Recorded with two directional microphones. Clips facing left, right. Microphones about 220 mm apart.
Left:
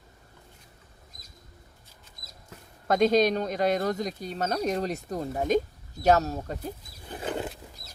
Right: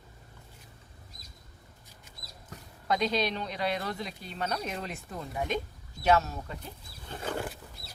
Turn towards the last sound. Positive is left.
turn(degrees=20)  # may be behind; listen again after turning